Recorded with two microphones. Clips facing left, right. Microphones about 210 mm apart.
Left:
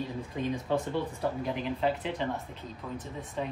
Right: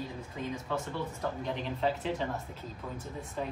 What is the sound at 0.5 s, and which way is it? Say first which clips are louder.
Speech: left 6 dB; 35° left (ahead or behind).